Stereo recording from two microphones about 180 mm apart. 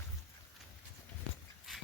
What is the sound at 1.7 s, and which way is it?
Dog, centre (ahead or behind).